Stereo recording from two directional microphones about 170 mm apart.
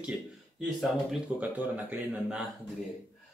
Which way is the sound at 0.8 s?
5° right (ahead or behind).